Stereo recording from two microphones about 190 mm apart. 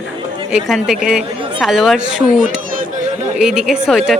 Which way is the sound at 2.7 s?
45° right (ahead or behind).